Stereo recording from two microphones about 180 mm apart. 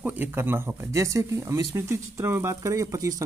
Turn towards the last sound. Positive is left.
turn(degrees=-20)  # may be behind; listen again after turning